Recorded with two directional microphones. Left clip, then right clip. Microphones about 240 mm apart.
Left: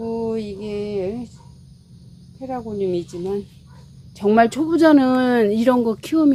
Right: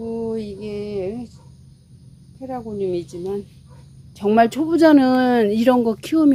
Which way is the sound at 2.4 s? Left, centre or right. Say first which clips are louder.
Left 1 dB; centre.